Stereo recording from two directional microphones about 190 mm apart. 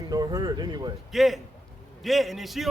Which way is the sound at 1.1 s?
Centre (ahead or behind).